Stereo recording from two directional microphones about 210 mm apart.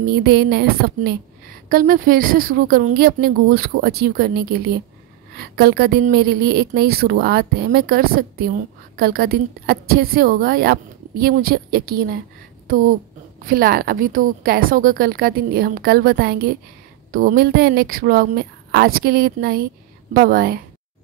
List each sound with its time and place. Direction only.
0.1 s a woman's voice: 50° right (ahead or behind)
13.4 s a woman's voice: 45° right (ahead or behind)